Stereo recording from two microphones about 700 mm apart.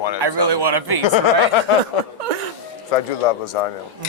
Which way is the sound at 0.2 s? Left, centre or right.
Right.